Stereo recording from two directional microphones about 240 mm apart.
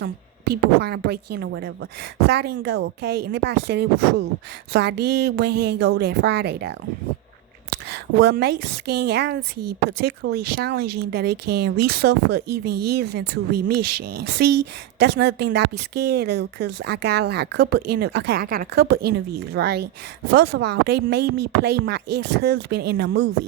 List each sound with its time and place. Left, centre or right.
0.0 s speech: right
7.9 s speech: right